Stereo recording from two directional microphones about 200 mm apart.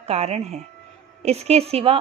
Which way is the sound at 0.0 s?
30° right (ahead or behind).